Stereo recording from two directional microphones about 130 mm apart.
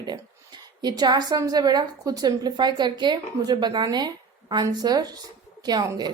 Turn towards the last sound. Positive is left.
turn(degrees=-30)  # may be behind; listen again after turning